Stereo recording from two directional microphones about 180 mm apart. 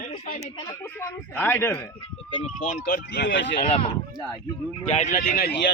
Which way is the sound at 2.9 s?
65° left (ahead or behind).